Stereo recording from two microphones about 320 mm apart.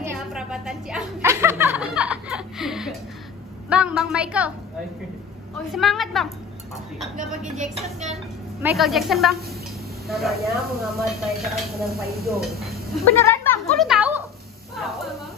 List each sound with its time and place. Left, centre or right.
0.0 s a sound: centre
3.7 s speech: centre
5.7 s speech: centre
7.5 s speech: right
8.6 s speech: centre